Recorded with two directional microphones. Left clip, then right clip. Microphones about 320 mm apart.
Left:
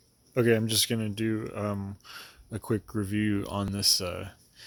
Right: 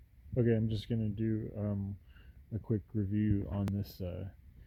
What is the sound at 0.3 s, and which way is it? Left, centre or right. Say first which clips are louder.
Speech: left 9 dB; centre.